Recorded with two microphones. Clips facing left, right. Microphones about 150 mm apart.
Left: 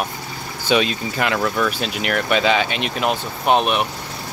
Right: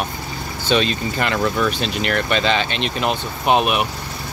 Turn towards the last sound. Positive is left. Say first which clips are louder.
# even
turn(degrees=-5)  # may be behind; listen again after turning